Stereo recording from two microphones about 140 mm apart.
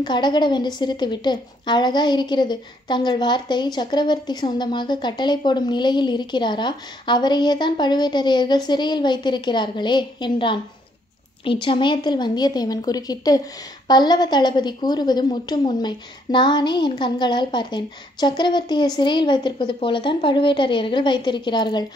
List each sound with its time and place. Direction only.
0.0 s a woman's voice: 35° left (ahead or behind)
11.6 s a woman's voice: 35° left (ahead or behind)